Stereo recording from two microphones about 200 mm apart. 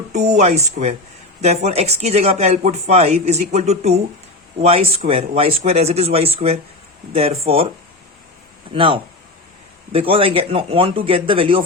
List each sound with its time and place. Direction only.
0.1 s speech: 35° right (ahead or behind)
8.7 s speech: 25° right (ahead or behind)
10.1 s speech: 30° right (ahead or behind)